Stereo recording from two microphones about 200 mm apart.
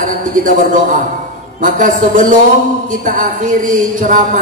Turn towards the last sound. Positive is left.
turn(degrees=-40)  # may be behind; listen again after turning